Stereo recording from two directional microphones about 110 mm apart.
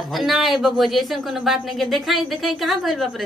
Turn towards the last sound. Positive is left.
turn(degrees=0)  # may be behind; listen again after turning